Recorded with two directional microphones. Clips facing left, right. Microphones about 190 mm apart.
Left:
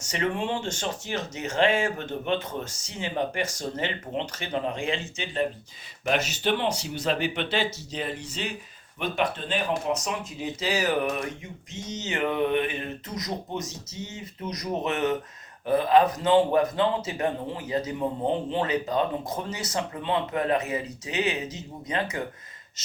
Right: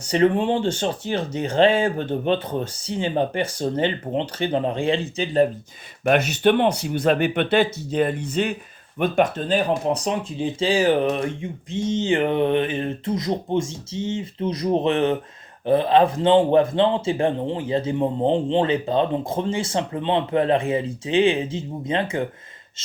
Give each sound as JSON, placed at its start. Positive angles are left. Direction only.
{"t": 0.0, "sound": "speech", "side_deg": -35}
{"t": 6.1, "sound": "speech", "side_deg": -60}